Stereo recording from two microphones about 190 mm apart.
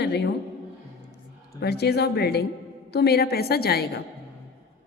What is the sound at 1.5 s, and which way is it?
A woman's voice, 60° left (ahead or behind).